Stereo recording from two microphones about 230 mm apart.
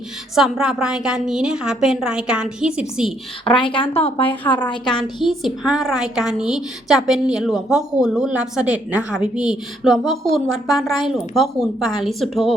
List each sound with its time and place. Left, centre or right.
0.3 s a woman's voice: centre
3.4 s speech: left
5.2 s a woman's voice: centre